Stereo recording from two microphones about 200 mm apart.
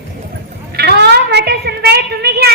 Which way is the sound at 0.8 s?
55° right (ahead or behind).